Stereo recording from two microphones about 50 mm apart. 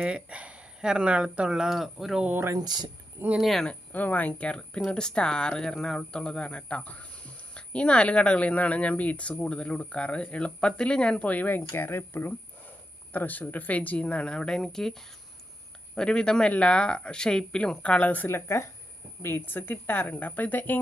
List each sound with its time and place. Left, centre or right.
0.0 s speech: right; by 2.2 s centre
3.3 s speech: centre
3.9 s speech: left
4.3 s speech: left
13.1 s speech: left
18.3 s speech: left
19.5 s speech: left